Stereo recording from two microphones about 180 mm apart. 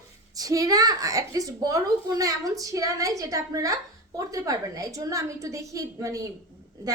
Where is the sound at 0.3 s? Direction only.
20° right (ahead or behind).